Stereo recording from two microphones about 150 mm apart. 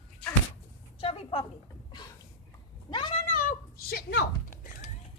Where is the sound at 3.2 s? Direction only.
65° left (ahead or behind); by 4.6 s 90° left.